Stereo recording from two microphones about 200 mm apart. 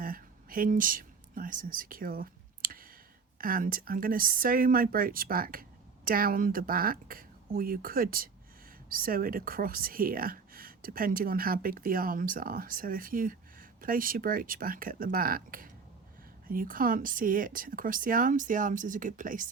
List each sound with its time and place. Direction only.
0.0 s whispering: 45° right (ahead or behind)
3.3 s a woman's voice: 45° right (ahead or behind)